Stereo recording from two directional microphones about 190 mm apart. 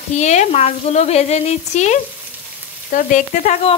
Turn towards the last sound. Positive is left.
turn(degrees=40)  # may be behind; listen again after turning